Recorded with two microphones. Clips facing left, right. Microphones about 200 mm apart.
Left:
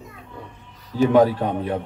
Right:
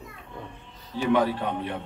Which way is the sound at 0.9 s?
45° left (ahead or behind).